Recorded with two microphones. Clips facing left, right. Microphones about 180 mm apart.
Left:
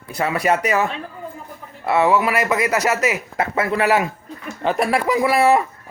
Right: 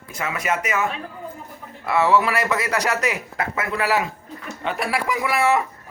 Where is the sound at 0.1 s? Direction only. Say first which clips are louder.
Left 6 dB; 35° left (ahead or behind).